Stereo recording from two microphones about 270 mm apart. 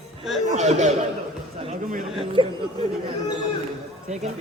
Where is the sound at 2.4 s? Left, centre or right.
Centre.